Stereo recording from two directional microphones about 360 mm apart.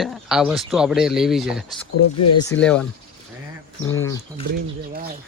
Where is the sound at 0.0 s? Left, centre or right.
Centre.